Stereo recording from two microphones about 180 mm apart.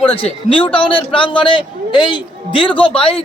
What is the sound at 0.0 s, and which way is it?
A man's voice, 30° left (ahead or behind).